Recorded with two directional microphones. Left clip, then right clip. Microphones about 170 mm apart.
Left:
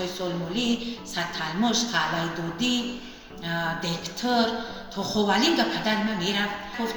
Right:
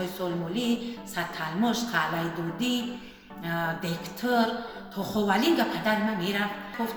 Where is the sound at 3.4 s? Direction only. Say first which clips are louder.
Left 2 dB; 15° right (ahead or behind).